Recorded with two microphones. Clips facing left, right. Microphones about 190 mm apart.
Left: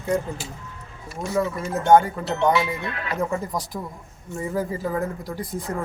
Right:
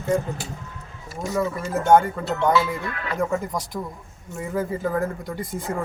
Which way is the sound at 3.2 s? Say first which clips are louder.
Right 2 dB; centre (ahead or behind).